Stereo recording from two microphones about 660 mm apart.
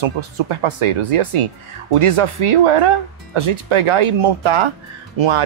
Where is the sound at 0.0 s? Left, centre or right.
Right.